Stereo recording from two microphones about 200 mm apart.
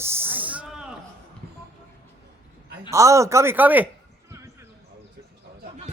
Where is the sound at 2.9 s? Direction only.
15° right (ahead or behind).